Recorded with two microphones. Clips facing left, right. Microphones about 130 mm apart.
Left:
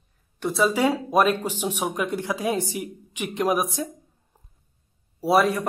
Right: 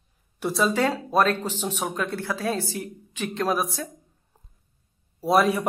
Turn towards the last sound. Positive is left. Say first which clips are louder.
# left 1 dB
turn(degrees=0)  # may be behind; listen again after turning